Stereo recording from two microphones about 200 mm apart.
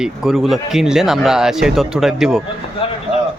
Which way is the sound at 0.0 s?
5° right (ahead or behind).